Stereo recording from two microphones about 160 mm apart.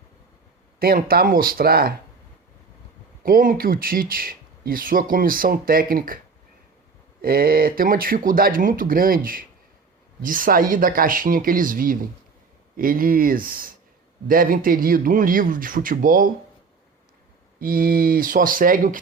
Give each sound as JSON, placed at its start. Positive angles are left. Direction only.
{"t": 0.8, "sound": "speech", "side_deg": -65}
{"t": 3.2, "sound": "speech", "side_deg": -60}
{"t": 7.2, "sound": "speech", "side_deg": -65}
{"t": 17.6, "sound": "speech", "side_deg": -65}